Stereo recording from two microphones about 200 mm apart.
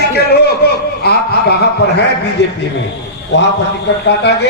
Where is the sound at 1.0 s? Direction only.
55° left (ahead or behind).